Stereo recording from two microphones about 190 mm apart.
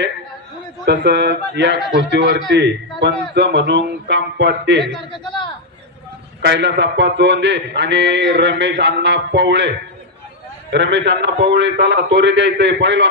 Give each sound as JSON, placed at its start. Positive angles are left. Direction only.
{"t": 0.8, "sound": "a man's voice", "side_deg": -65}
{"t": 5.1, "sound": "a man's voice", "side_deg": 25}
{"t": 6.4, "sound": "a man's voice", "side_deg": -65}
{"t": 10.7, "sound": "a man's voice", "side_deg": -70}